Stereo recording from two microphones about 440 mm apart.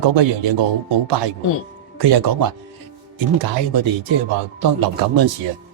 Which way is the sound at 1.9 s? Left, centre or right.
Right.